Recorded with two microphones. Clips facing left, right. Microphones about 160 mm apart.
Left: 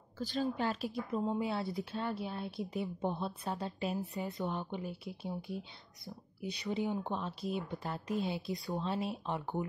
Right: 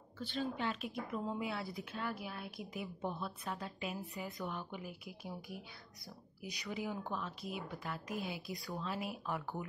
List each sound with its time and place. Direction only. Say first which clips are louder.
0.2 s a woman's voice: left 4 dB; 40° left (ahead or behind); by 9.7 s 25° left (ahead or behind)